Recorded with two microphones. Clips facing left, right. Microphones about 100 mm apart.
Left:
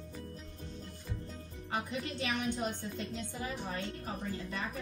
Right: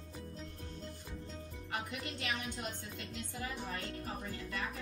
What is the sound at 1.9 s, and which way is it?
Speech, 25° left (ahead or behind).